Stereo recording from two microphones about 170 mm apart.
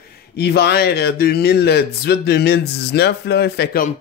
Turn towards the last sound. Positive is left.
turn(degrees=70)  # may be behind; listen again after turning